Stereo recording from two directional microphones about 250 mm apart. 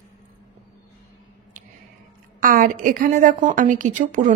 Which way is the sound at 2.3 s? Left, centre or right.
Right.